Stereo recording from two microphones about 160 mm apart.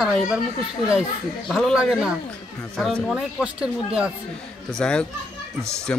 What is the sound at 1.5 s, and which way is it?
Speech, centre (ahead or behind).